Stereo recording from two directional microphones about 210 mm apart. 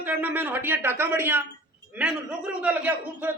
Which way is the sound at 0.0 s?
10° right (ahead or behind).